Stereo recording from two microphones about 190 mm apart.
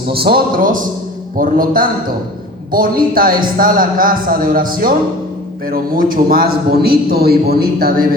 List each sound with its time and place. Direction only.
0.1 s a man's voice: 55° right (ahead or behind)